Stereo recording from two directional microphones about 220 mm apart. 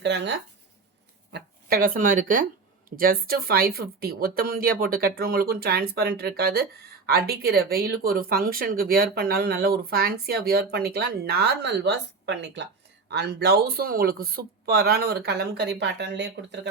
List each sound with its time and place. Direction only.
0.0 s speech: 55° right (ahead or behind)
1.3 s speech: 40° right (ahead or behind)